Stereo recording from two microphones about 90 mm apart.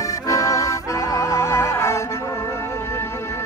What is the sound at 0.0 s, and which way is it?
Music, 40° left (ahead or behind).